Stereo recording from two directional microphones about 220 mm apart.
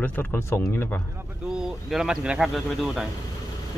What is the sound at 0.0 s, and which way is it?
Speech, 10° left (ahead or behind).